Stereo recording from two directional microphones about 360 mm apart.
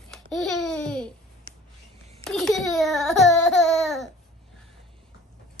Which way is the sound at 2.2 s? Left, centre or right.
Centre.